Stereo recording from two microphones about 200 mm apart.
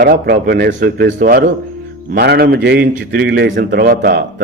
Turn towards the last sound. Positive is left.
turn(degrees=-50)  # may be behind; listen again after turning